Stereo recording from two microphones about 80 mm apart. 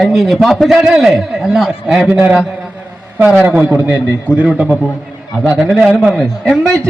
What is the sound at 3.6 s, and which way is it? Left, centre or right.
A man's voice, centre.